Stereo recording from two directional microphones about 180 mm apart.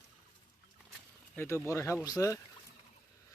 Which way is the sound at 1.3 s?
15° left (ahead or behind).